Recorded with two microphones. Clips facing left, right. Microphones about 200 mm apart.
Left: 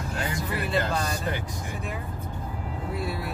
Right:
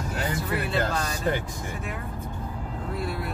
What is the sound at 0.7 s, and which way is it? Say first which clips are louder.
Speech: left 2 dB; centre (ahead or behind).